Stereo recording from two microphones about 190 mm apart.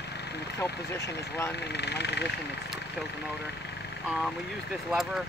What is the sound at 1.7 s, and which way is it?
Speech, 60° left (ahead or behind).